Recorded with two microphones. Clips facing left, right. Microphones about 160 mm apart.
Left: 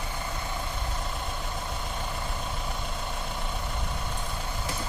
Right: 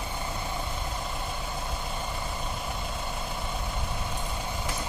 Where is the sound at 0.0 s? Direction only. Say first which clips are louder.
Right 1 dB; 15° right (ahead or behind).